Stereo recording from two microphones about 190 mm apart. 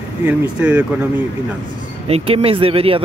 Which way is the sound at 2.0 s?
30° right (ahead or behind).